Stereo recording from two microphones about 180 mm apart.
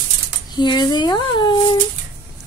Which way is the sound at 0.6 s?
25° left (ahead or behind).